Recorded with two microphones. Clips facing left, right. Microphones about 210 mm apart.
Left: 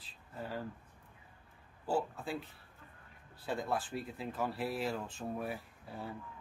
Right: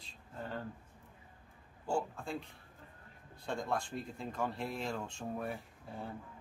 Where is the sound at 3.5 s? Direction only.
5° left (ahead or behind).